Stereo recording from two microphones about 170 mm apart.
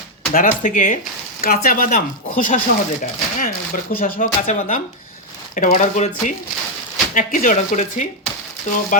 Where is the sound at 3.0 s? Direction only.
55° left (ahead or behind).